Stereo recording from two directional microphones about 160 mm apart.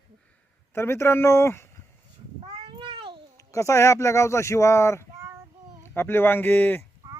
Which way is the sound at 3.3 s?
20° left (ahead or behind).